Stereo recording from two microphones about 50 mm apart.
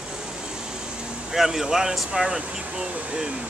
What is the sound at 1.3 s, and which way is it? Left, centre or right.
Speech, centre.